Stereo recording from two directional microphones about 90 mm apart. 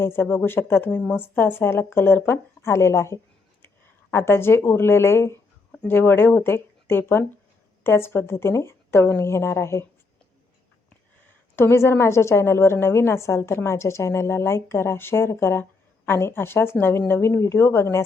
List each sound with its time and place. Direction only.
0.0 s a woman's voice: 25° left (ahead or behind)
11.5 s a woman's voice: 30° left (ahead or behind)